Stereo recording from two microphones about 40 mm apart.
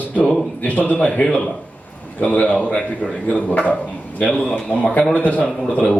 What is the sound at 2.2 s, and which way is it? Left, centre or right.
Speech, left.